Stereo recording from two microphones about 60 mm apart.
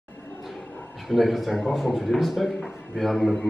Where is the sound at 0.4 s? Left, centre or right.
Centre.